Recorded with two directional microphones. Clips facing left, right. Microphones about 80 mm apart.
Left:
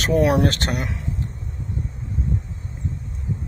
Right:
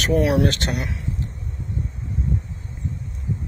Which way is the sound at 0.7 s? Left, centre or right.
Left.